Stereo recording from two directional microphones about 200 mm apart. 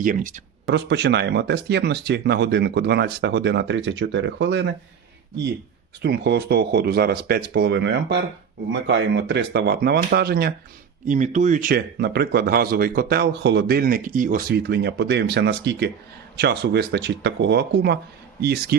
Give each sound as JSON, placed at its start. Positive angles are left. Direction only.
{"t": 0.0, "sound": "speech", "side_deg": -40}
{"t": 0.7, "sound": "speech", "side_deg": -60}
{"t": 6.0, "sound": "speech", "side_deg": -55}
{"t": 11.0, "sound": "speech", "side_deg": -40}